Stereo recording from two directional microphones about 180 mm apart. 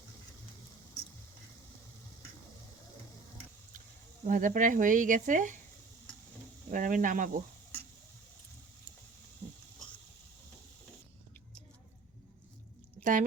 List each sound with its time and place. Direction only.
4.2 s speech: 45° right (ahead or behind)
6.7 s speech: 45° right (ahead or behind)
13.0 s a sound: 45° right (ahead or behind)